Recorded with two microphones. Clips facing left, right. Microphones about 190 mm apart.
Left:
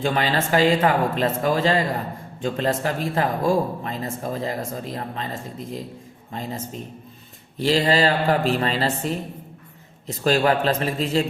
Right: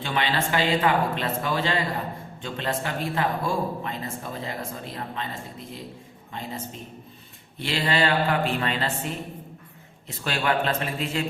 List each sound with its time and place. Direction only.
0.0 s speech: 45° left (ahead or behind)
7.6 s speech: 40° left (ahead or behind)